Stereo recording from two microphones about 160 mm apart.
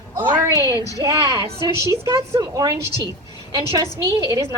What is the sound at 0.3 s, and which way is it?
A woman's voice, 15° right (ahead or behind).